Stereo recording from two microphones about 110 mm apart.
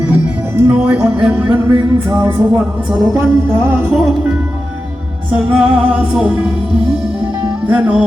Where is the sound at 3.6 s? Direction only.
20° right (ahead or behind).